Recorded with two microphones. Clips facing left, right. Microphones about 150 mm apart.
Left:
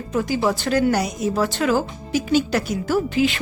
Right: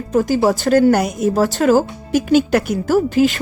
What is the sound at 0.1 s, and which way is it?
Speech, 40° right (ahead or behind).